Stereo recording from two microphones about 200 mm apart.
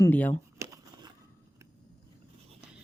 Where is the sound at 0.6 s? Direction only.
15° right (ahead or behind).